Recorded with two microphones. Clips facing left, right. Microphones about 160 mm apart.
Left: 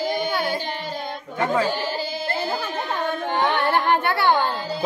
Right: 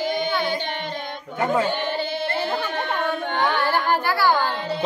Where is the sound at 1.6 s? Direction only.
5° left (ahead or behind).